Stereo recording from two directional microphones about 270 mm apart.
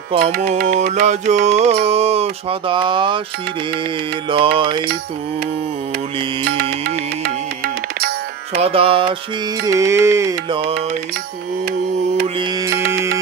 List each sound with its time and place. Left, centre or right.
0.3 s music: right; by 3.2 s centre
4.3 s music: centre
7.2 s music: right
8.5 s music: right